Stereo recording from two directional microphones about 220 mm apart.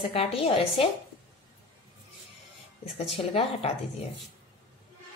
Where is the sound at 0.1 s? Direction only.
25° left (ahead or behind).